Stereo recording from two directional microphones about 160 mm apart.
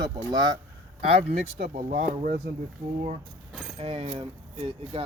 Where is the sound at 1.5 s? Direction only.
70° right (ahead or behind).